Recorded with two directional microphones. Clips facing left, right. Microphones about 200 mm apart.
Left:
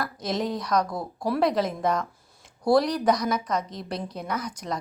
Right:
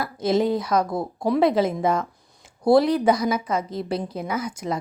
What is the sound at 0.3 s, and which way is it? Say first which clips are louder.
Speech: right 4 dB; 5° right (ahead or behind).